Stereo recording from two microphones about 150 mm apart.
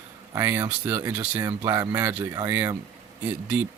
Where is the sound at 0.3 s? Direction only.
15° right (ahead or behind).